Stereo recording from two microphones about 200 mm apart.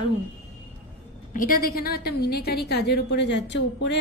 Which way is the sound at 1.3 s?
45° left (ahead or behind).